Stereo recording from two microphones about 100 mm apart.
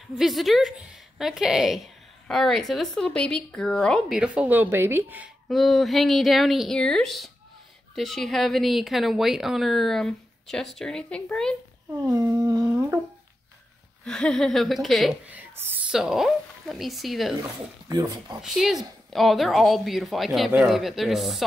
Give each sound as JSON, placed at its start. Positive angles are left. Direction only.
{"t": 0.2, "sound": "speech", "side_deg": 0}
{"t": 4.1, "sound": "speech", "side_deg": -10}
{"t": 5.5, "sound": "speech", "side_deg": 0}
{"t": 12.1, "sound": "humming", "side_deg": -35}
{"t": 14.0, "sound": "speech", "side_deg": 10}
{"t": 15.2, "sound": "speech", "side_deg": -20}
{"t": 15.9, "sound": "speech", "side_deg": -5}
{"t": 17.4, "sound": "speech", "side_deg": -35}
{"t": 18.4, "sound": "speech", "side_deg": -5}